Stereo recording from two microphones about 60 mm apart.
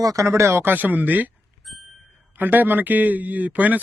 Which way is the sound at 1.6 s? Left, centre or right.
Centre.